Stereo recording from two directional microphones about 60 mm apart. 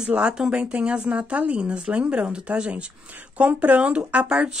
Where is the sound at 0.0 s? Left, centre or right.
Centre.